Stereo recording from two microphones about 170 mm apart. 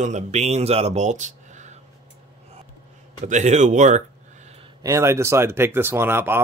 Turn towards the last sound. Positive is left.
turn(degrees=-15)  # may be behind; listen again after turning